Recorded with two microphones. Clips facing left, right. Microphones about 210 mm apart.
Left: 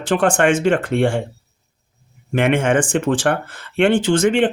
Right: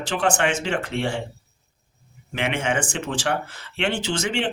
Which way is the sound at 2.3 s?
50° left (ahead or behind).